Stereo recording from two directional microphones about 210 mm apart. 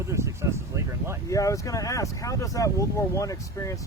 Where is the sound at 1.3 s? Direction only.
15° left (ahead or behind).